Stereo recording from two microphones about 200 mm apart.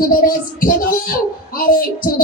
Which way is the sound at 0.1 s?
45° left (ahead or behind).